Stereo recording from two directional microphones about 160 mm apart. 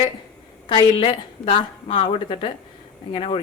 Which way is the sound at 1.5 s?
35° left (ahead or behind).